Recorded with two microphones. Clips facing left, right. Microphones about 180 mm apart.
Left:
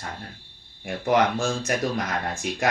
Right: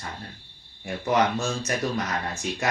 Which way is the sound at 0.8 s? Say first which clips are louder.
Left 2 dB; 55° left (ahead or behind).